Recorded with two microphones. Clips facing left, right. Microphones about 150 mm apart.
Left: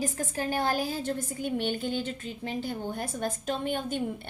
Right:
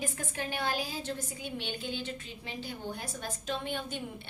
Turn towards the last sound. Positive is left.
turn(degrees=50)  # may be behind; listen again after turning